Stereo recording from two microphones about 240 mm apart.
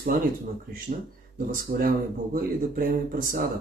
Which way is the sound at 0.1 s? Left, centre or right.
Right.